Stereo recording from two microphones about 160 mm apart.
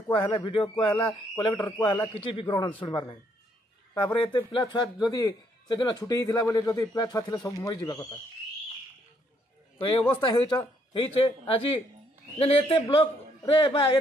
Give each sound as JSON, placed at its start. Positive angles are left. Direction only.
{"t": 0.1, "sound": "a man's voice", "side_deg": 30}
{"t": 10.2, "sound": "a man's voice", "side_deg": 30}